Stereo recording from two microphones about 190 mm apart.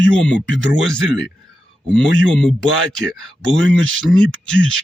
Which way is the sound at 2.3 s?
5° left (ahead or behind).